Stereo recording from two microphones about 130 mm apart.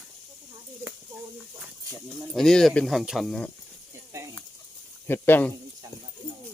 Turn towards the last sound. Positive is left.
turn(degrees=15)  # may be behind; listen again after turning